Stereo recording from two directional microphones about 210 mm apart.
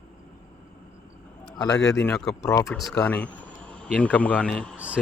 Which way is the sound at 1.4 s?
20° left (ahead or behind).